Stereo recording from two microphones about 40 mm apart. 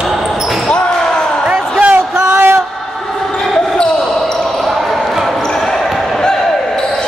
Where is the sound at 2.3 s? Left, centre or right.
Right.